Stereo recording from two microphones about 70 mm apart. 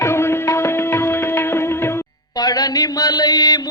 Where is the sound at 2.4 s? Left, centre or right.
Left.